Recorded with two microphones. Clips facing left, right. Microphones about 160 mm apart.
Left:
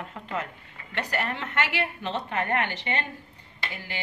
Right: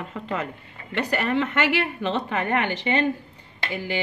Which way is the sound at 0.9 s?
90° right.